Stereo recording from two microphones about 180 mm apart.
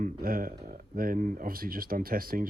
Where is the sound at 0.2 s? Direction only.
50° right (ahead or behind).